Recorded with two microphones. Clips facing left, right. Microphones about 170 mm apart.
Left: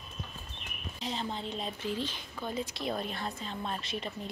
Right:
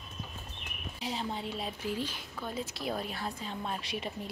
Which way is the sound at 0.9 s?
10° right (ahead or behind).